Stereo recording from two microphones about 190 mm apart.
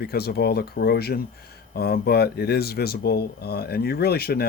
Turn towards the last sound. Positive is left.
turn(degrees=55)  # may be behind; listen again after turning